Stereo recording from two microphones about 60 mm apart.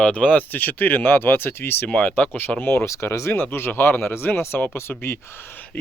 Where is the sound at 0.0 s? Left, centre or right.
Left.